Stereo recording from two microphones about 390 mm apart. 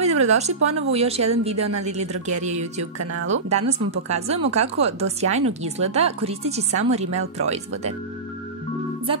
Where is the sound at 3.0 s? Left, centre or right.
Right.